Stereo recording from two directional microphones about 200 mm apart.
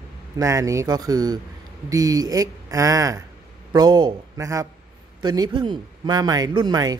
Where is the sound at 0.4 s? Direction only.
15° right (ahead or behind).